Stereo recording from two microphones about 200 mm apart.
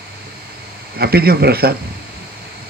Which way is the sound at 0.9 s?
50° right (ahead or behind).